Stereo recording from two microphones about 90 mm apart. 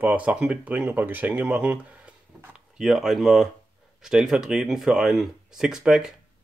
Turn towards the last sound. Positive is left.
turn(degrees=-5)  # may be behind; listen again after turning